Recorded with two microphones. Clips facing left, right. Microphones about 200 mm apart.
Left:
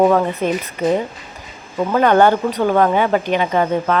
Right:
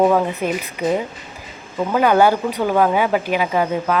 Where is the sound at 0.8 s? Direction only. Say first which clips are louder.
Left 2 dB; 10° right (ahead or behind).